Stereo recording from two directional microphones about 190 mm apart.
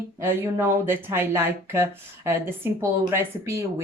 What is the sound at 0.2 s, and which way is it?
Speech, 10° right (ahead or behind).